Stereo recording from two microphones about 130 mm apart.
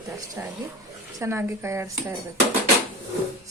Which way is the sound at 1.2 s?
20° right (ahead or behind).